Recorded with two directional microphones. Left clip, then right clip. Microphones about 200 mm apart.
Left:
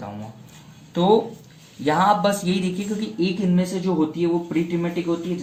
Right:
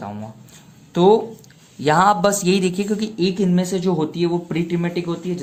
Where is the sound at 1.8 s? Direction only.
50° right (ahead or behind).